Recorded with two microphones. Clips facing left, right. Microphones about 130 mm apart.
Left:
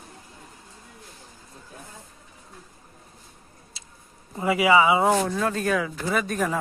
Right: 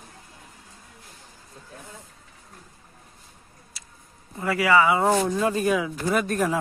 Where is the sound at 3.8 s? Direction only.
25° left (ahead or behind).